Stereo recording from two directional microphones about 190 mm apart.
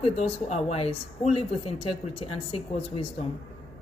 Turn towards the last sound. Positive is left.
turn(degrees=35)  # may be behind; listen again after turning